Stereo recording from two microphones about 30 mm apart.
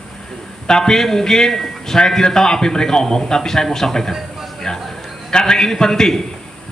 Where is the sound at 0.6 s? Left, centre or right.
Centre.